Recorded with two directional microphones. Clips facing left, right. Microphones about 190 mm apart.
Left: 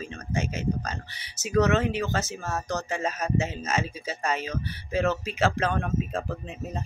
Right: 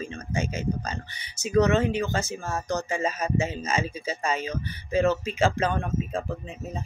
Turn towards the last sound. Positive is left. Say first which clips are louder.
# even
turn(degrees=0)  # may be behind; listen again after turning